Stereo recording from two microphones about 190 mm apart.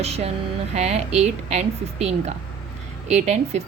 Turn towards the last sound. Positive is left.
turn(degrees=-35)  # may be behind; listen again after turning